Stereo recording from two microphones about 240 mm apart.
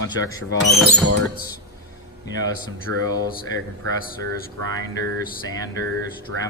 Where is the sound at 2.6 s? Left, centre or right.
Centre.